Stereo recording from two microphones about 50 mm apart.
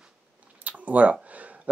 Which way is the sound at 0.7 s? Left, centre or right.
Right.